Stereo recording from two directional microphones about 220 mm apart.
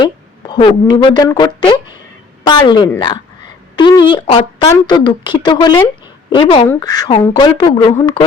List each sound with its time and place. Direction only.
0.0 s speech: 20° left (ahead or behind)